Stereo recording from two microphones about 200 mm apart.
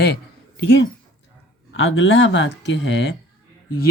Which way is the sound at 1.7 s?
80° left.